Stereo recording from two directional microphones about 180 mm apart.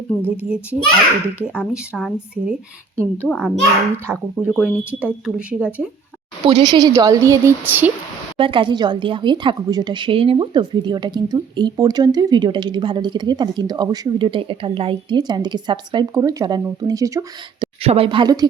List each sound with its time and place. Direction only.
0.2 s speech: 10° right (ahead or behind)
3.2 s speech: centre (ahead or behind)
4.6 s speech: 5° right (ahead or behind)
6.5 s a woman's voice: 25° right (ahead or behind)
8.4 s a woman's voice: 30° right (ahead or behind)
17.8 s a woman's voice: 30° right (ahead or behind)